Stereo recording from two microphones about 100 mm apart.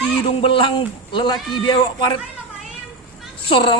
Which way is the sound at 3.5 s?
55° left (ahead or behind).